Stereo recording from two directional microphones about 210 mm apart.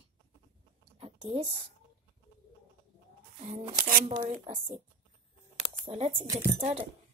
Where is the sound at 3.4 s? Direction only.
35° right (ahead or behind).